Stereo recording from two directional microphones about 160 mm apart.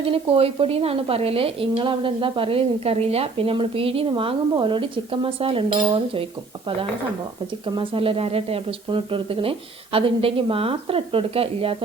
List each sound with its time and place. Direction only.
0.1 s a woman's voice: 35° right (ahead or behind)
7.8 s a woman's voice: 35° right (ahead or behind)